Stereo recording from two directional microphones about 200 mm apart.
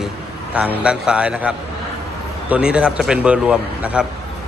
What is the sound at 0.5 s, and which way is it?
A man's voice, 5° right (ahead or behind).